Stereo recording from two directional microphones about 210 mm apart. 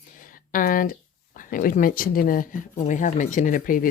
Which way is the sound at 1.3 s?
40° left (ahead or behind).